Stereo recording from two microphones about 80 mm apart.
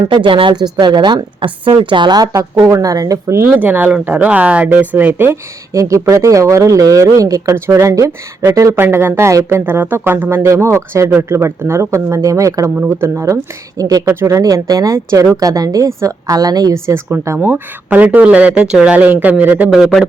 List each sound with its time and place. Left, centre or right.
0.1 s speech: right
0.8 s a woman's voice: right
3.6 s speech: right
5.7 s speech: right
8.8 s a woman's voice: right
14.3 s speech: right
16.7 s a woman's voice: right; by 19.9 s centre